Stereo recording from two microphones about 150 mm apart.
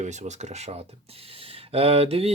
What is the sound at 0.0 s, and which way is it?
Speech, 50° right (ahead or behind).